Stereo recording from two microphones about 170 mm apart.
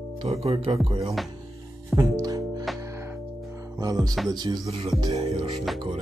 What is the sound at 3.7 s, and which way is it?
Speech, 20° right (ahead or behind).